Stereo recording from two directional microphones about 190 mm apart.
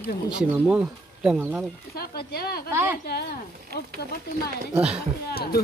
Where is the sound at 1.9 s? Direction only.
55° left (ahead or behind).